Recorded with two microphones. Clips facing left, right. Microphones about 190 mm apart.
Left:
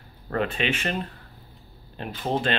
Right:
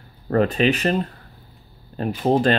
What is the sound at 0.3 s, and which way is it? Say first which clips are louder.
Speech: right 8 dB; 40° right (ahead or behind).